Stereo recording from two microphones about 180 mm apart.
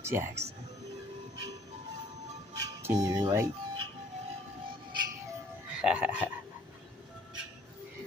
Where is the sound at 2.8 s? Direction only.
20° right (ahead or behind).